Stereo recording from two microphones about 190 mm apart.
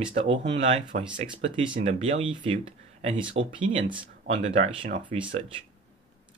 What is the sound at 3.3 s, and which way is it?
Speech, 85° right.